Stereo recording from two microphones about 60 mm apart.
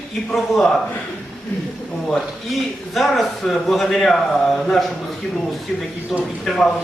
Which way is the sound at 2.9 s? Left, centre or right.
Centre.